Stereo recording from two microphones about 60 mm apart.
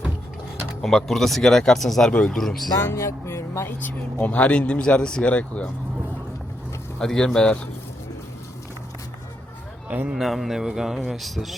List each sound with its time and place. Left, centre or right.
0.8 s a man's voice: centre
2.9 s speech: left
3.8 s speech: left
7.0 s speech: centre
10.2 s a man's voice: centre